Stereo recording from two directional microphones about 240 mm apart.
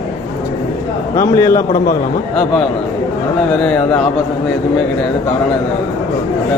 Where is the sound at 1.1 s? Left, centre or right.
Centre.